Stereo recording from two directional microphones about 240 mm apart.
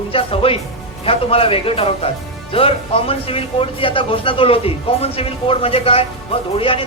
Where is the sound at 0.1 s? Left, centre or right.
Left.